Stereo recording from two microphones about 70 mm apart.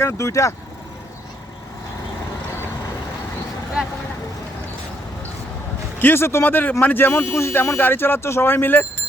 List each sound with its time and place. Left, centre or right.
0.0 s speech: left
6.0 s speech: left